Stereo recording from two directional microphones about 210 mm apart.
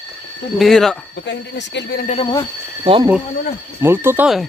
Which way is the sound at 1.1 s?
55° left (ahead or behind).